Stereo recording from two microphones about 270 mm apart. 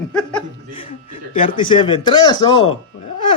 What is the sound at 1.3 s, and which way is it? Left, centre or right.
Speech, centre.